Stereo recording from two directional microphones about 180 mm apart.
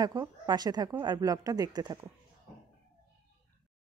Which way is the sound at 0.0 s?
20° right (ahead or behind).